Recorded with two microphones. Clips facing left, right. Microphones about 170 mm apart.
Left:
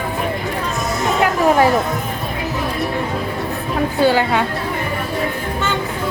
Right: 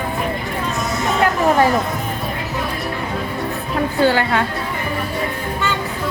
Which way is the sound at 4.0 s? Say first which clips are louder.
Left 1 dB; 15° left (ahead or behind).